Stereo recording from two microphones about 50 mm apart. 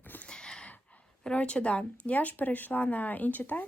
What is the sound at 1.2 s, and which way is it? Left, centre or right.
Speech, left.